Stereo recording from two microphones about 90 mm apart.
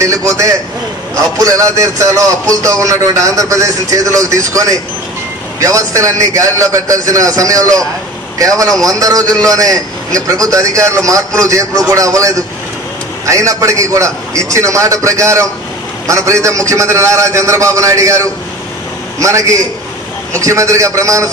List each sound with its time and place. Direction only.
0.0 s a man's voice: 35° right (ahead or behind)